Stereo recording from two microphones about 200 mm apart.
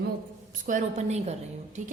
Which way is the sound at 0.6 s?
35° right (ahead or behind).